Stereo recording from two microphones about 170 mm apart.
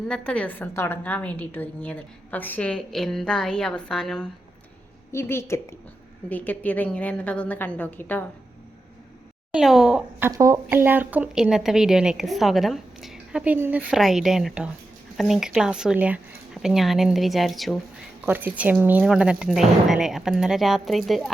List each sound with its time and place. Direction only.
0.1 s a woman's voice: 5° left (ahead or behind)
5.1 s a woman's voice: 15° left (ahead or behind)
9.5 s speech: 5° right (ahead or behind)
18.3 s speech: 10° right (ahead or behind)